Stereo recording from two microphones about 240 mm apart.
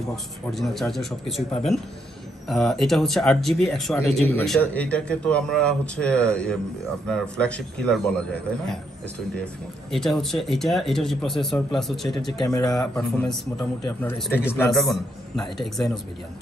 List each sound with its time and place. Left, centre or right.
0.1 s speech: centre
9.4 s speech: centre
12.3 s speech: centre
12.6 s speech: centre